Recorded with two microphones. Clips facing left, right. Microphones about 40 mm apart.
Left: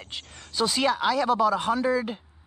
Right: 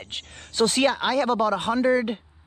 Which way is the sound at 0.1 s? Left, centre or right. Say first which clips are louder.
Even; right.